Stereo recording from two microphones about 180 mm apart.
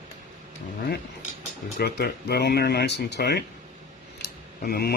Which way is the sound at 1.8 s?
65° left (ahead or behind).